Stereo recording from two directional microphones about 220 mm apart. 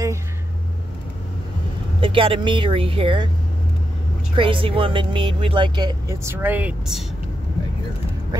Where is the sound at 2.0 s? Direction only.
25° right (ahead or behind).